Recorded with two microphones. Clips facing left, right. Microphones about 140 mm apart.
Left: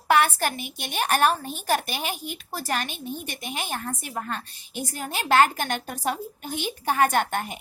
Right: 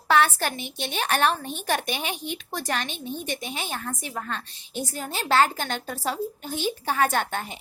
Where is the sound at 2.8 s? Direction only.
10° left (ahead or behind).